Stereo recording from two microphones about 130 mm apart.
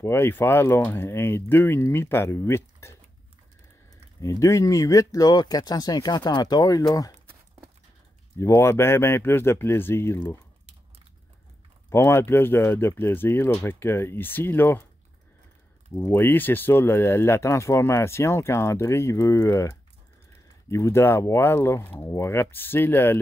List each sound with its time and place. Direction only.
0.0 s speech: 20° left (ahead or behind)
4.2 s speech: 25° left (ahead or behind)
8.4 s speech: 20° left (ahead or behind)
11.9 s speech: 20° left (ahead or behind)
15.9 s speech: 15° left (ahead or behind)
20.7 s speech: 20° left (ahead or behind)